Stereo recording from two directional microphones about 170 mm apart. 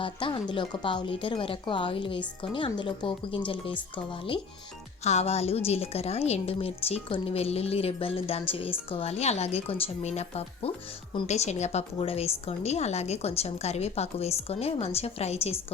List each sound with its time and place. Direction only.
0.0 s a woman's voice: 30° left (ahead or behind)